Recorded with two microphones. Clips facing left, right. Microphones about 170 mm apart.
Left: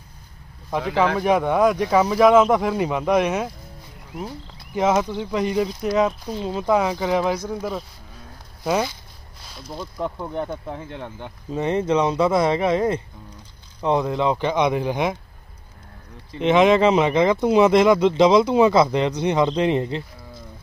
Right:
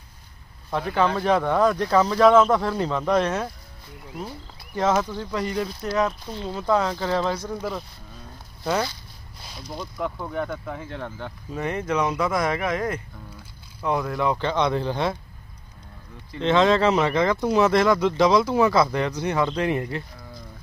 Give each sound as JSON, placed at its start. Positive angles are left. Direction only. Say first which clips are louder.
{"t": 1.1, "sound": "speech", "louder": "left 2 dB", "side_deg": 15}
{"t": 4.7, "sound": "speech", "louder": "left 3 dB", "side_deg": 15}
{"t": 9.6, "sound": "speech", "louder": "left 1 dB", "side_deg": 0}
{"t": 9.9, "sound": "speech", "louder": "left 1 dB", "side_deg": 20}
{"t": 16.3, "sound": "speech", "louder": "left 3 dB", "side_deg": 15}